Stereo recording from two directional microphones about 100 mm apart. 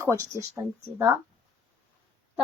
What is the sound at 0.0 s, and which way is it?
Speech, 30° right (ahead or behind).